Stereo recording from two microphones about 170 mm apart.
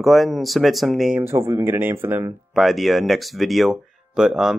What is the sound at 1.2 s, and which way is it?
Speech, 15° right (ahead or behind).